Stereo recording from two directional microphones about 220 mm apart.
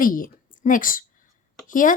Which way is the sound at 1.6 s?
35° left (ahead or behind).